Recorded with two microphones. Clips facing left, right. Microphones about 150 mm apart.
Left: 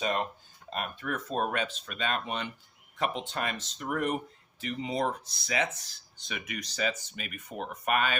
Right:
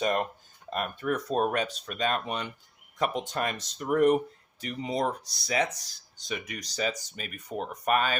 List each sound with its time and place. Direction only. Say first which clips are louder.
0.0 s speech: right 3 dB; 50° right (ahead or behind)